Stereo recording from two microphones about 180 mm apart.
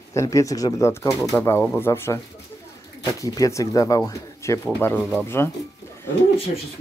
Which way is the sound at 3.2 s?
20° left (ahead or behind).